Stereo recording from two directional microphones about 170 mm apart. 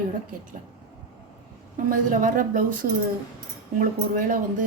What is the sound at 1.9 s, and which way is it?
A woman's voice, 50° right (ahead or behind).